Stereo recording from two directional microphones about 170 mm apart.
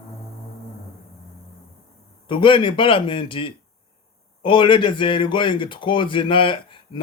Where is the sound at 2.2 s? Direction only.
30° left (ahead or behind).